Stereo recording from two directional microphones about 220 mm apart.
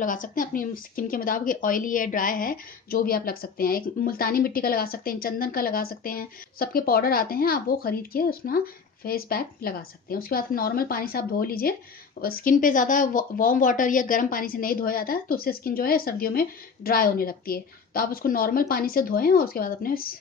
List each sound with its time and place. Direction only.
0.0 s a woman's voice: 35° left (ahead or behind)